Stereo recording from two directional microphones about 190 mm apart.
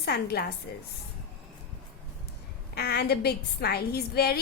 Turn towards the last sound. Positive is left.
turn(degrees=55)  # may be behind; listen again after turning